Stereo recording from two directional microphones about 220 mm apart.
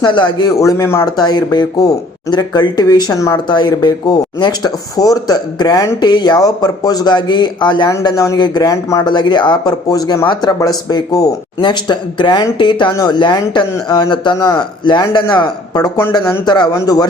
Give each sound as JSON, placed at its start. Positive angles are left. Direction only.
{"t": 0.0, "sound": "speech", "side_deg": 20}